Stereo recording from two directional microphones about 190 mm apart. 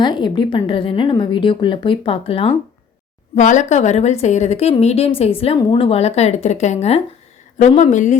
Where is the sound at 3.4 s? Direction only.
40° left (ahead or behind).